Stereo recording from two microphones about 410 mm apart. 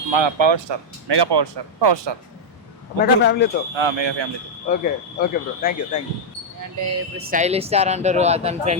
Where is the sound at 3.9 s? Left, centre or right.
Right.